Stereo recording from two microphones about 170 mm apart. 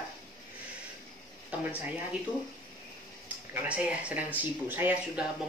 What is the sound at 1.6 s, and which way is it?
Speech, 10° right (ahead or behind).